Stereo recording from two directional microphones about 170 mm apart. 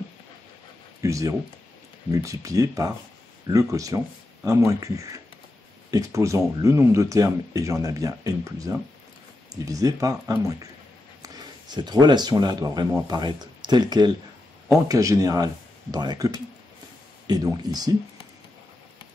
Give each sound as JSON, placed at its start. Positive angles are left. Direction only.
{"t": 1.0, "sound": "speech", "side_deg": -20}